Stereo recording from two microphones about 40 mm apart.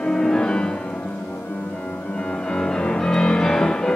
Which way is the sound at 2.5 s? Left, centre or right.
Left.